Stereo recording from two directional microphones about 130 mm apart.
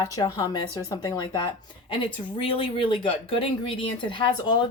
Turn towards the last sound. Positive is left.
turn(degrees=35)  # may be behind; listen again after turning